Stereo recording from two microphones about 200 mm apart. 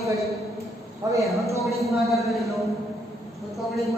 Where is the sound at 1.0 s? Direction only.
20° right (ahead or behind).